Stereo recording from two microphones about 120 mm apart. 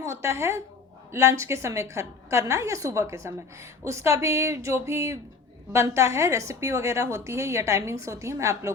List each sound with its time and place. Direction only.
0.0 s a woman's voice: 25° right (ahead or behind)